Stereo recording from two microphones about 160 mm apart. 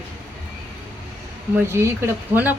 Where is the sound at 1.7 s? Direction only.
15° right (ahead or behind).